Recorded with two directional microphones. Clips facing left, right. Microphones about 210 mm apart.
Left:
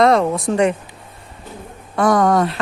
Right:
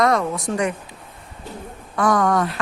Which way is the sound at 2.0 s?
35° left (ahead or behind).